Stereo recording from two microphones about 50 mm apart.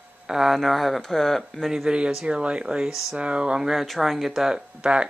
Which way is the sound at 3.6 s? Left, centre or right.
Centre.